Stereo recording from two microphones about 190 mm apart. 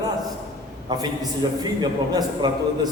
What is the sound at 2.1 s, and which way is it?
Speech, 20° right (ahead or behind).